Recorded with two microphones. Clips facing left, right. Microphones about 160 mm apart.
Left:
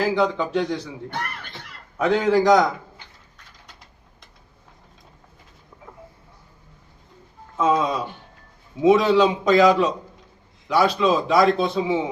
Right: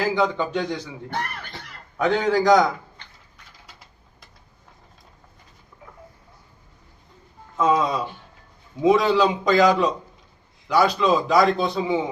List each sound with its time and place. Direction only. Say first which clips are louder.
0.0 s a man's voice: left 1 dB; centre (ahead or behind)
2.0 s a man's voice: left 2 dB; centre (ahead or behind)
5.7 s a sound: left 1 dB; 25° left (ahead or behind)
7.5 s a man's voice: even; centre (ahead or behind)